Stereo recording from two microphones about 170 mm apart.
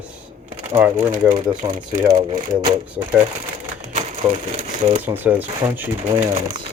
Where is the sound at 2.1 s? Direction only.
25° right (ahead or behind).